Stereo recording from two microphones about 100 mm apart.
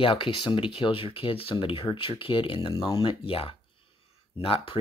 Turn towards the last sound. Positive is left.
turn(degrees=70)  # may be behind; listen again after turning